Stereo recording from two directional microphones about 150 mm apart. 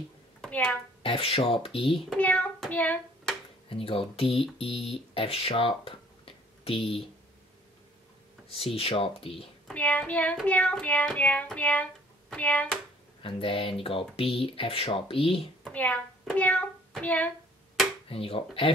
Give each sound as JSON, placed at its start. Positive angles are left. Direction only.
{"t": 0.4, "sound": "a sound", "side_deg": 5}
{"t": 1.0, "sound": "speech", "side_deg": 40}
{"t": 2.0, "sound": "hands", "side_deg": 10}
{"t": 3.6, "sound": "speech", "side_deg": 40}
{"t": 8.5, "sound": "speech", "side_deg": 40}
{"t": 9.7, "sound": "child singing", "side_deg": 10}
{"t": 13.2, "sound": "speech", "side_deg": 35}
{"t": 15.6, "sound": "a child's voice", "side_deg": 10}
{"t": 16.3, "sound": "hands", "side_deg": 10}
{"t": 18.0, "sound": "speech", "side_deg": 40}